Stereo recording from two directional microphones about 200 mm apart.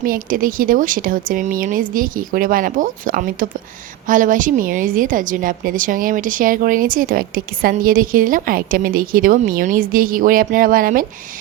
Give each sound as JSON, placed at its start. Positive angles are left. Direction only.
{"t": 0.0, "sound": "a woman's voice", "side_deg": -45}